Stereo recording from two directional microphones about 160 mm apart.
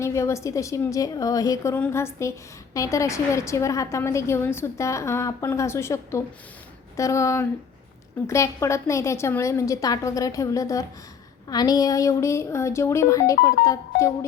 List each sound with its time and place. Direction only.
0.0 s a woman's voice: 20° left (ahead or behind)